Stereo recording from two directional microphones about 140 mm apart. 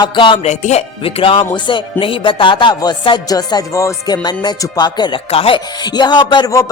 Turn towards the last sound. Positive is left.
turn(degrees=25)  # may be behind; listen again after turning